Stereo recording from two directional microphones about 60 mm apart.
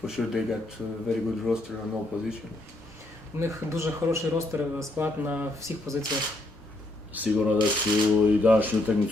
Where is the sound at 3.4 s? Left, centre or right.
Right.